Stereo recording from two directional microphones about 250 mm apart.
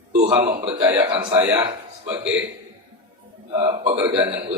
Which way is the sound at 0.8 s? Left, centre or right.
Centre.